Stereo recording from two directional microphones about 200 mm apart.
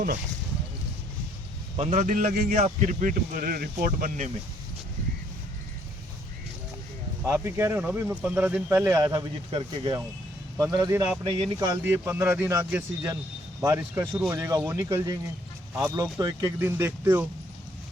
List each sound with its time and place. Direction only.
1.7 s speech: 35° right (ahead or behind)
7.3 s speech: 10° right (ahead or behind)